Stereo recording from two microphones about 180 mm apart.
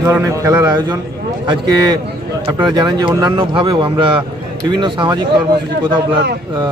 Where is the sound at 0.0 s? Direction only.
15° right (ahead or behind).